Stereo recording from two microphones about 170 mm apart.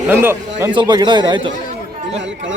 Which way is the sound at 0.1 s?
15° right (ahead or behind).